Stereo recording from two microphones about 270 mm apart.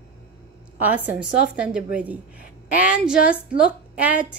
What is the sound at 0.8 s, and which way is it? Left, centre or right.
A woman's voice, centre.